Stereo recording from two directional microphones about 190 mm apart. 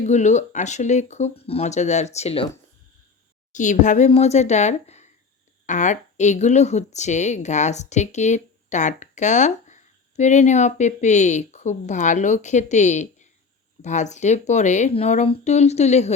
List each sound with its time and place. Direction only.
0.0 s speech: 40° left (ahead or behind)
3.5 s speech: 40° left (ahead or behind)